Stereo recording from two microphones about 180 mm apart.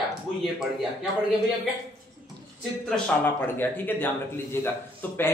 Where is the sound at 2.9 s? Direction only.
10° left (ahead or behind).